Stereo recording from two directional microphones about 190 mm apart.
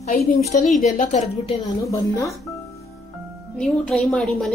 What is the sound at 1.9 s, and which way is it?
Speech, 15° left (ahead or behind).